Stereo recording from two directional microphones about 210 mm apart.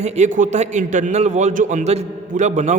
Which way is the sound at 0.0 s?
35° right (ahead or behind).